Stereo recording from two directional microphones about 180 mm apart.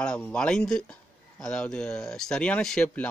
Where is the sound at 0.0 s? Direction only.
5° left (ahead or behind).